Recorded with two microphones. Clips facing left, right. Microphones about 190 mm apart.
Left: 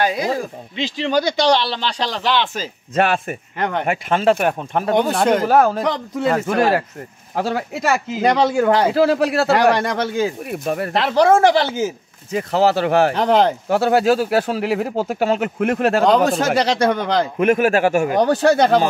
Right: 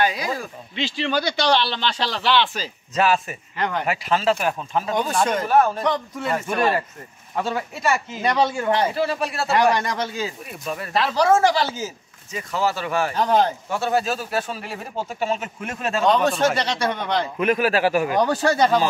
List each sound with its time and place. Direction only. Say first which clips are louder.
0.0 s speech: left 3 dB; 45° left (ahead or behind)
0.8 s speech: left 5 dB; 20° left (ahead or behind)
1.7 s speech: left 2 dB; 35° left (ahead or behind); by 9.8 s 70° left (ahead or behind)
9.8 s speech: left 6 dB; 55° left (ahead or behind); by 17.3 s 90° left
17.4 s speech: left 4 dB; 50° left (ahead or behind)